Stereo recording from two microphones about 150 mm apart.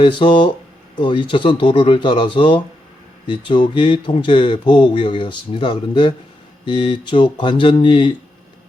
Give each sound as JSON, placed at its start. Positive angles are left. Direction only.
{"t": 0.0, "sound": "speech", "side_deg": 35}